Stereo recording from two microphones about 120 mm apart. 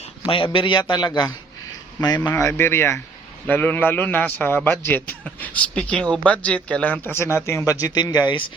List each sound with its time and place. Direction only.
0.3 s a man's voice: 45° left (ahead or behind)
2.2 s a man's voice: 20° left (ahead or behind); by 8.5 s 40° left (ahead or behind)